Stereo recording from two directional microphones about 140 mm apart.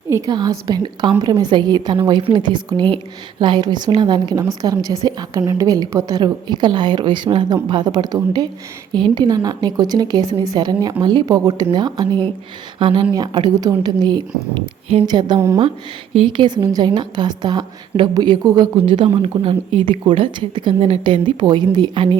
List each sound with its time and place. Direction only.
0.3 s a woman's voice: 30° right (ahead or behind)
15.4 s a woman's voice: 20° right (ahead or behind)
16.1 s a woman's voice: 35° right (ahead or behind)